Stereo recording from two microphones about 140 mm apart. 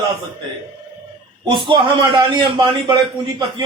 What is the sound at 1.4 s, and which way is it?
Speech, 35° right (ahead or behind).